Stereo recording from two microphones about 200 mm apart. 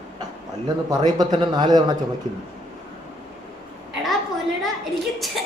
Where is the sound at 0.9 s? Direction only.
20° right (ahead or behind).